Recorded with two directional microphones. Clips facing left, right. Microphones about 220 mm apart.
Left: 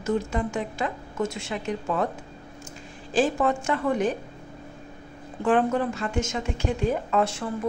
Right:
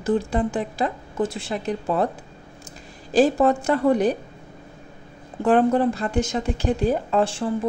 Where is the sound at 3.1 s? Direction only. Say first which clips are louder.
Right 5 dB; 35° right (ahead or behind).